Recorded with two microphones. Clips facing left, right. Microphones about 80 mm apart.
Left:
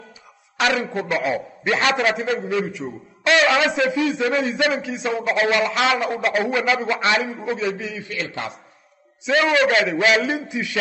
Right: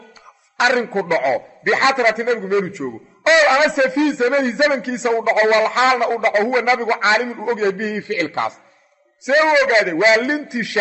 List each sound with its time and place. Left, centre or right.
0.6 s a man's voice: right
8.1 s a man's voice: right
9.2 s a man's voice: right